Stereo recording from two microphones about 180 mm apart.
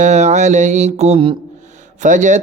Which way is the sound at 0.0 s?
40° right (ahead or behind).